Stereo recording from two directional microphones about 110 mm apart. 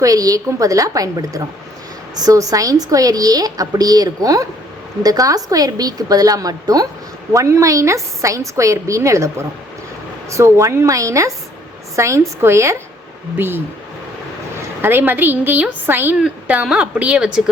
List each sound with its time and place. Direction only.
0.0 s a woman's voice: 35° right (ahead or behind); by 17.5 s 10° right (ahead or behind)